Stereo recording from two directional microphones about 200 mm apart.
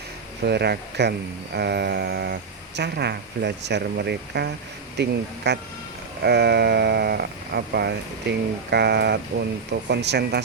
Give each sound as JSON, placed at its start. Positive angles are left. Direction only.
{"t": 0.4, "sound": "speech", "side_deg": -55}